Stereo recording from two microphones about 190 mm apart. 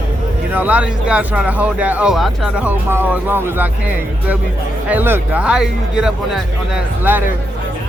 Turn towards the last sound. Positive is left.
turn(degrees=-5)  # may be behind; listen again after turning